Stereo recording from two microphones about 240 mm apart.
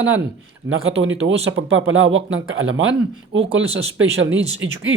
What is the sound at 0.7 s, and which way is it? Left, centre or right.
Speech, right.